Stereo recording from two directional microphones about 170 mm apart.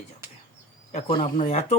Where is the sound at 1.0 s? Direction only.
30° left (ahead or behind).